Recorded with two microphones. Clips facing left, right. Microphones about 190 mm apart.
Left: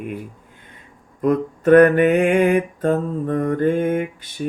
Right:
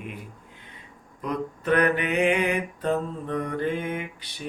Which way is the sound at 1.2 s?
50° left (ahead or behind).